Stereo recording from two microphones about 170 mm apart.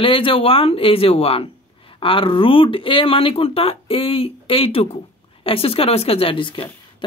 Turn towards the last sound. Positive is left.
turn(degrees=30)  # may be behind; listen again after turning